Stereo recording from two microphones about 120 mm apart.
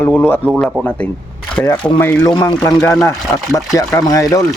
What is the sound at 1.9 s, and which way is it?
A man's voice, 15° left (ahead or behind).